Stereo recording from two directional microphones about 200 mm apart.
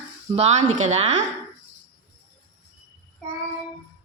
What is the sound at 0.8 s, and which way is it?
Speech, 35° right (ahead or behind).